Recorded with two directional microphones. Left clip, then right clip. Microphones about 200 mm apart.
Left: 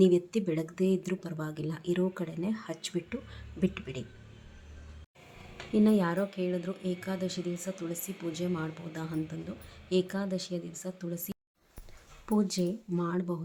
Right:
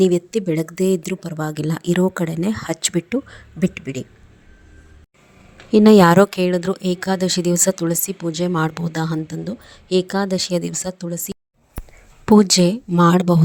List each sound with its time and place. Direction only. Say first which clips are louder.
0.0 s speech: right 9 dB; 45° right (ahead or behind)
5.7 s speech: right 18 dB; 50° right (ahead or behind)
11.8 s a sound: right 17 dB; centre (ahead or behind)
12.2 s speech: right 17 dB; 45° right (ahead or behind)